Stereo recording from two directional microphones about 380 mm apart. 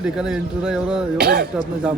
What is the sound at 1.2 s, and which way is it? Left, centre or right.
Speech, right.